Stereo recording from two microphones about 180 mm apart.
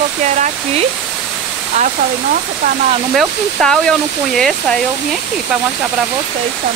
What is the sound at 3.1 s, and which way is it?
Speech, centre (ahead or behind).